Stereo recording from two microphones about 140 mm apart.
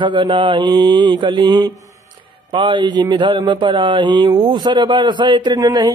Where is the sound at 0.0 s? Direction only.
35° right (ahead or behind).